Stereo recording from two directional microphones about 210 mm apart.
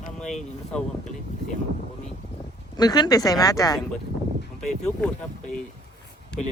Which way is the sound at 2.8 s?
20° left (ahead or behind).